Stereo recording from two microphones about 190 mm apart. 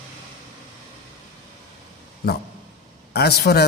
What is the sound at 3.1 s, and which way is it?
Speech, 60° left (ahead or behind).